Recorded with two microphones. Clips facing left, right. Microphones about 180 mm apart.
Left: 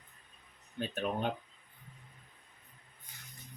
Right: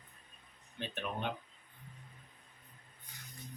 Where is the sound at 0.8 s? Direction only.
40° left (ahead or behind).